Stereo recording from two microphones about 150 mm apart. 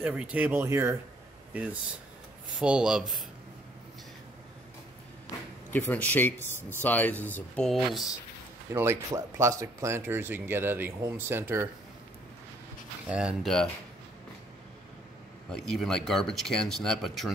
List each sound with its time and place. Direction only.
0.0 s speech: 10° right (ahead or behind)
5.7 s speech: 10° left (ahead or behind)
6.4 s speech: 15° right (ahead or behind)
6.8 s speech: 10° left (ahead or behind)
8.7 s speech: 20° right (ahead or behind)
13.0 s speech: 5° right (ahead or behind)
15.5 s speech: 5° left (ahead or behind)